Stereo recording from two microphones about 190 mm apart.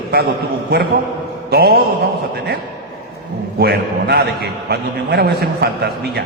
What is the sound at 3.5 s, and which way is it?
A man's voice, 55° right (ahead or behind).